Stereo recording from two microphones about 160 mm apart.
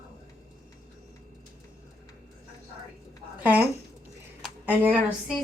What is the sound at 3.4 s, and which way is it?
Speech, 10° right (ahead or behind).